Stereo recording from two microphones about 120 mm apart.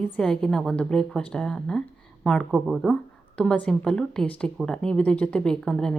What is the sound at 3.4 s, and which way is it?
Speech, 10° left (ahead or behind).